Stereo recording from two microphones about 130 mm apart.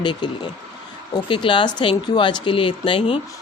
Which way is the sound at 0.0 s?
35° left (ahead or behind).